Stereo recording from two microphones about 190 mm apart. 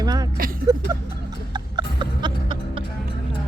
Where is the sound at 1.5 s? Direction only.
25° right (ahead or behind).